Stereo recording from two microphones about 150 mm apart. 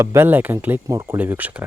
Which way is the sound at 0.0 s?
15° right (ahead or behind).